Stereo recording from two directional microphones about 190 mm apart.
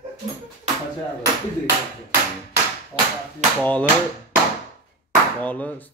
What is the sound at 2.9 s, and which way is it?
Speech, 5° left (ahead or behind).